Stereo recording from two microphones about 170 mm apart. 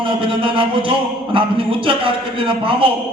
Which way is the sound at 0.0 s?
30° right (ahead or behind).